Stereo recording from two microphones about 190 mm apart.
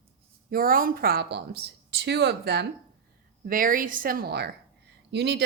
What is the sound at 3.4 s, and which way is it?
Speech, 45° right (ahead or behind).